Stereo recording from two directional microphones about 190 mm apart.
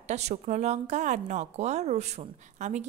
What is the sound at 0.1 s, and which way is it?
A woman's voice, 35° right (ahead or behind).